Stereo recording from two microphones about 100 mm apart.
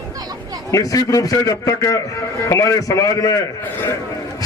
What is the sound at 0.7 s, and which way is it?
A man's voice, 35° left (ahead or behind).